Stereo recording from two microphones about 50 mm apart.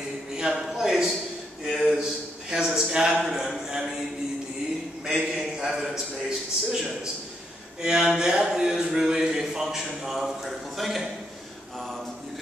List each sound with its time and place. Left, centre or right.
0.4 s a man's voice: centre
1.7 s a sound: centre
2.5 s a man's voice: centre
5.2 s a man's voice: centre
7.8 s a man's voice: centre